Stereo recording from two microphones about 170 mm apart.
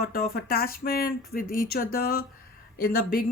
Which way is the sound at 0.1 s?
60° left (ahead or behind).